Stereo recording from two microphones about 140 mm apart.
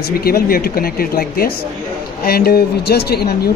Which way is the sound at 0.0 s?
90° left.